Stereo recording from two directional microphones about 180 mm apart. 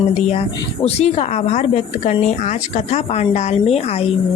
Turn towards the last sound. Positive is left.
turn(degrees=35)  # may be behind; listen again after turning